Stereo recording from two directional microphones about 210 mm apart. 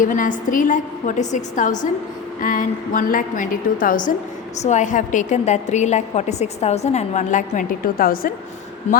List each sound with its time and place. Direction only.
0.0 s a woman's voice: 40° left (ahead or behind)